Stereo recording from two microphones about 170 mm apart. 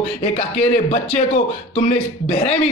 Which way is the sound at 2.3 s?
40° left (ahead or behind).